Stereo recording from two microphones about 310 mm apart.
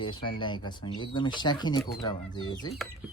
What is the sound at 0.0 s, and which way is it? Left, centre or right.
Speech, centre.